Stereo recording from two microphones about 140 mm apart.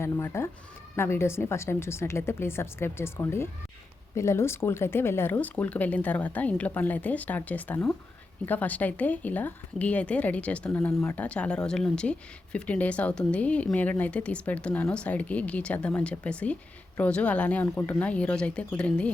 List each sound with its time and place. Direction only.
0.0 s speech: 20° left (ahead or behind)